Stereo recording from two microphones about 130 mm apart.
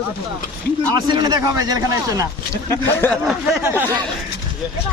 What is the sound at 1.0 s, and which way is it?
Speech, 35° right (ahead or behind).